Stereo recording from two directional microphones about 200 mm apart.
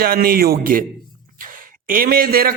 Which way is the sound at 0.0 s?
50° right (ahead or behind).